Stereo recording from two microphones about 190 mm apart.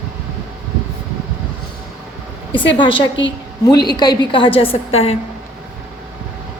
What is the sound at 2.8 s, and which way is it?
A woman's voice, 25° left (ahead or behind).